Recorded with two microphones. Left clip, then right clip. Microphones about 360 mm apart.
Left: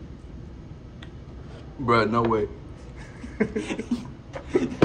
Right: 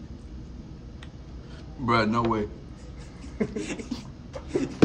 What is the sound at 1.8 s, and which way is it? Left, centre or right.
Speech, centre.